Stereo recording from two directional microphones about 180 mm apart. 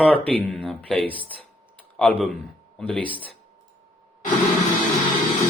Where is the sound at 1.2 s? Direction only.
30° right (ahead or behind).